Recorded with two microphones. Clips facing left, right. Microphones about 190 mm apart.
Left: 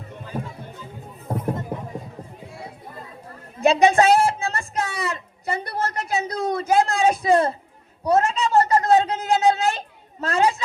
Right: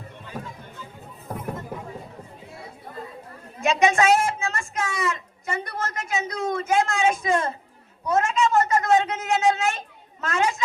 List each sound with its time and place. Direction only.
1.3 s music: 30° left (ahead or behind)
3.6 s a woman's voice: 35° left (ahead or behind)